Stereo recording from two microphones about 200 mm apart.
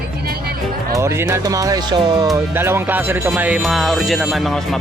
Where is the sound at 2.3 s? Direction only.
10° right (ahead or behind).